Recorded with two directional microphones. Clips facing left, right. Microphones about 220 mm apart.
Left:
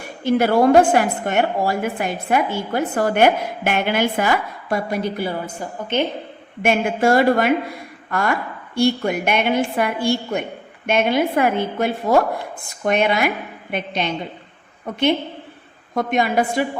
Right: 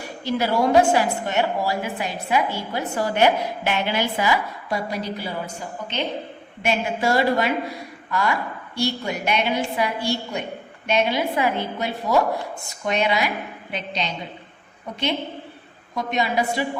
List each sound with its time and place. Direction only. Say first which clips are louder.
0.3 s a woman's voice: left 6 dB; 50° left (ahead or behind)
6.6 s a woman's voice: left 5 dB; 50° left (ahead or behind)
16.0 s a woman's voice: left 4 dB; 50° left (ahead or behind)